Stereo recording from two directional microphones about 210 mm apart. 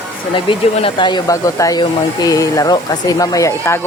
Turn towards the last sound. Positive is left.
turn(degrees=15)  # may be behind; listen again after turning